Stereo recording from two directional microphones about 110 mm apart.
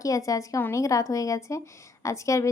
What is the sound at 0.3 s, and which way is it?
A woman's voice, 30° left (ahead or behind).